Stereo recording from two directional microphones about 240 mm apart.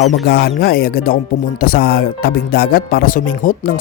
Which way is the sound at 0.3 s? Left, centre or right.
Left.